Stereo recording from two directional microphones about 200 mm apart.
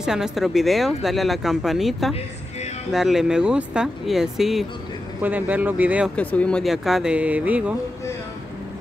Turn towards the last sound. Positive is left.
turn(degrees=-5)  # may be behind; listen again after turning